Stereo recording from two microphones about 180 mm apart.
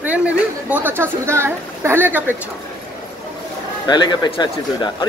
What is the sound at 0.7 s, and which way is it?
A woman's voice, 10° right (ahead or behind).